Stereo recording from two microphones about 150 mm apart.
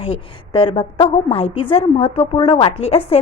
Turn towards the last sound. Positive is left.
turn(degrees=40)  # may be behind; listen again after turning